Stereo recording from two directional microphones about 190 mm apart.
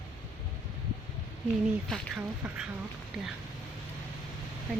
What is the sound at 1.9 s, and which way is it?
Speech, 5° right (ahead or behind).